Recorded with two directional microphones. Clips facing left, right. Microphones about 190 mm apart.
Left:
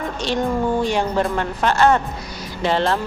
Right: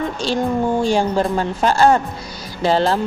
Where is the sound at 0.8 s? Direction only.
30° right (ahead or behind).